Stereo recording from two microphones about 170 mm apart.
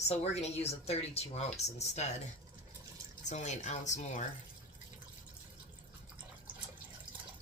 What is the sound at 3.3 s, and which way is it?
Speech, 45° left (ahead or behind).